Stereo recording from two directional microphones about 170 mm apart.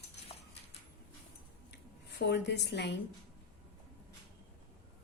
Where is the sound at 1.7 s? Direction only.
85° left.